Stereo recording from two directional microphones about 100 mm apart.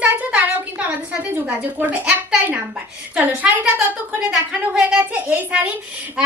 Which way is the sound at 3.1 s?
15° right (ahead or behind).